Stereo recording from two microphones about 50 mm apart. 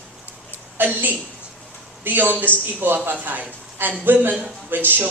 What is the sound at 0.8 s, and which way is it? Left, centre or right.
A man's voice, right.